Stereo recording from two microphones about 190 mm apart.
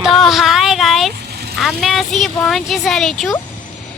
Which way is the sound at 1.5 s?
Centre (ahead or behind).